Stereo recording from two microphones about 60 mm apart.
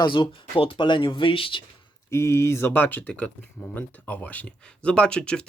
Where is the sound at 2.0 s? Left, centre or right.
Left.